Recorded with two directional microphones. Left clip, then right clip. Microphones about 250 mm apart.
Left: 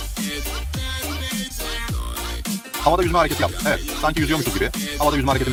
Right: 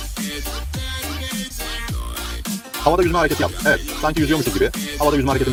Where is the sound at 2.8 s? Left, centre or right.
Centre.